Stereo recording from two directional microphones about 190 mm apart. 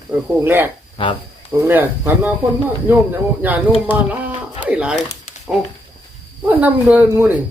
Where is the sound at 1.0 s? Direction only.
30° left (ahead or behind).